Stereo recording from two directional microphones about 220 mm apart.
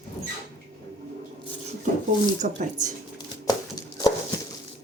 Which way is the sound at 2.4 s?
40° right (ahead or behind).